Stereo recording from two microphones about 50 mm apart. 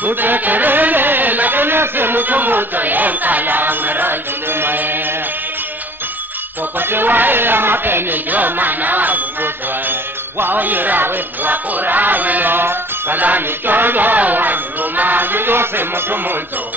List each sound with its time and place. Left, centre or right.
0.0 s music: right
6.8 s speech: right